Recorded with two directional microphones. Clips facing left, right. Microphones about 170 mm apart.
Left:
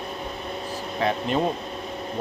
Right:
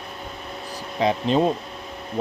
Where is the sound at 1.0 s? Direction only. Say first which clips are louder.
Right 4 dB; 15° right (ahead or behind).